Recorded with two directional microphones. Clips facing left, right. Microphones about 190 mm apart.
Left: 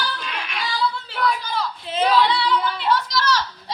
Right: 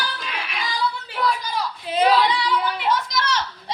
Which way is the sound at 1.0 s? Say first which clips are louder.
Even; 10° right (ahead or behind).